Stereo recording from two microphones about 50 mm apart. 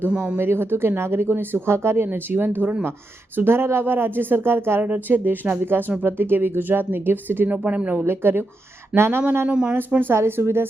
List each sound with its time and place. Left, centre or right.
0.3 s speech: right
4.8 s speech: right
8.0 s speech: right
9.5 s speech: centre
10.2 s speech: right